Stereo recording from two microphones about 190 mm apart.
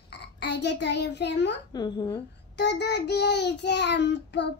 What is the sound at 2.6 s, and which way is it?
Child singing, 65° left (ahead or behind).